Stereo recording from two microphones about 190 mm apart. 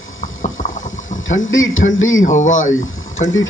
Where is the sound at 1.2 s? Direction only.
90° left.